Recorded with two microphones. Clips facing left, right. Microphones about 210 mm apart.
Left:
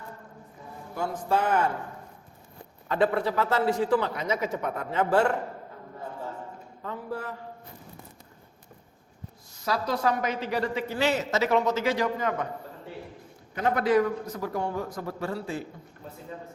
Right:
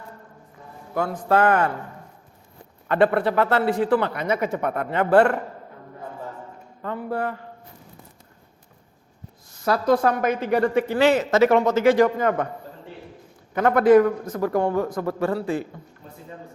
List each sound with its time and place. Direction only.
0.9 s a man's voice: 60° right (ahead or behind)
2.9 s a man's voice: 65° right (ahead or behind)
6.8 s a sound: 65° right (ahead or behind)
9.6 s a man's voice: 55° right (ahead or behind)
13.6 s a man's voice: 60° right (ahead or behind); by 15.1 s 85° right
15.2 s a man's voice: 55° right (ahead or behind)